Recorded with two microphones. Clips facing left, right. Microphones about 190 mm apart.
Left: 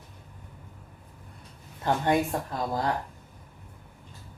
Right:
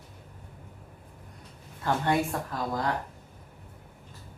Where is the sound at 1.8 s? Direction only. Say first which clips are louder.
Left 2 dB; 20° left (ahead or behind).